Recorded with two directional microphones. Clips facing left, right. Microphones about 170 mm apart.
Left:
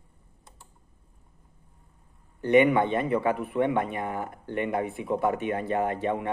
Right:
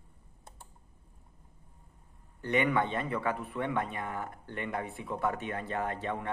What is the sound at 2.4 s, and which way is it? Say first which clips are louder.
Speech: left 8 dB; 15° left (ahead or behind).